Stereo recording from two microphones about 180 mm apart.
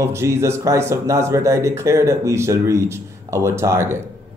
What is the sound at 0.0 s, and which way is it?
Speech, 15° right (ahead or behind).